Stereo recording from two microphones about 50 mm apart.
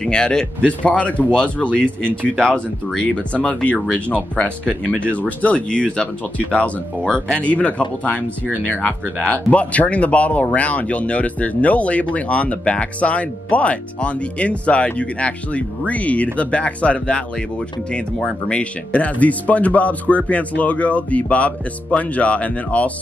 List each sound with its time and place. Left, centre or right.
0.0 s speech: centre
0.7 s speech: left
3.4 s speech: left
18.5 s speech: left